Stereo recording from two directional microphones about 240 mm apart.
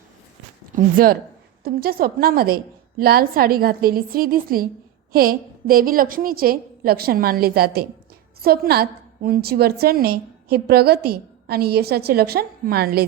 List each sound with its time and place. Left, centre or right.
0.9 s a woman's voice: right